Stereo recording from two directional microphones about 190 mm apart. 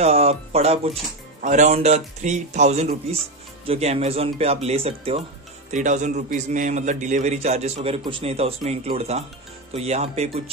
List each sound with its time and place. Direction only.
0.0 s a man's voice: 35° right (ahead or behind)